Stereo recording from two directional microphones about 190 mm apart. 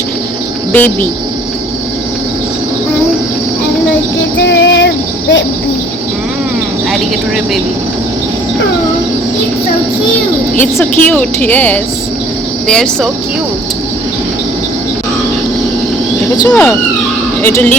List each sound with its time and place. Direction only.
0.7 s a woman's voice: 10° left (ahead or behind)
4.4 s a sound: 70° left (ahead or behind)
10.6 s a woman's voice: 10° left (ahead or behind)
16.5 s a woman's voice: 10° left (ahead or behind)